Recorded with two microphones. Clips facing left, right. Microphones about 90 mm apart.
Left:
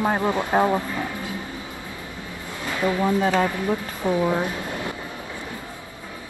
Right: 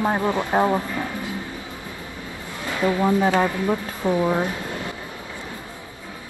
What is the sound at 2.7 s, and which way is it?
Speech, 20° right (ahead or behind).